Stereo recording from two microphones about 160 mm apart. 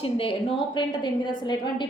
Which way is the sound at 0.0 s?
35° left (ahead or behind).